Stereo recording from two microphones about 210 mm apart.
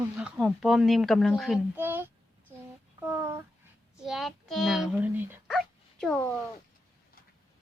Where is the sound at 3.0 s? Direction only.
10° right (ahead or behind).